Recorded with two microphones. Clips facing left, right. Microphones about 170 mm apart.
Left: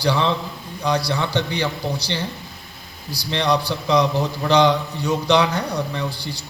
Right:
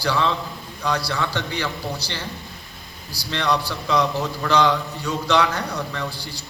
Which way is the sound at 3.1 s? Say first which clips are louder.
Left 3 dB; 15° left (ahead or behind).